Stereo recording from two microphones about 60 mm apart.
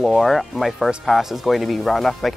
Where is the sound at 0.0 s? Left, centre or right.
Centre.